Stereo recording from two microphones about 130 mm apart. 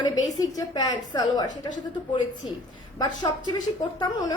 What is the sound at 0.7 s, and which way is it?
Speech, 30° left (ahead or behind).